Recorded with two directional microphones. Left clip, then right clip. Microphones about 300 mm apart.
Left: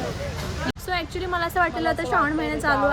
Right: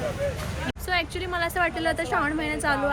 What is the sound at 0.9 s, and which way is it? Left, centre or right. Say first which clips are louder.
A woman's voice: even; centre.